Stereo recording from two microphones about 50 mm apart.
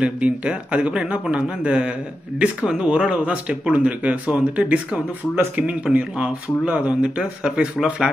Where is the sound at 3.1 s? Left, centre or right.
Right.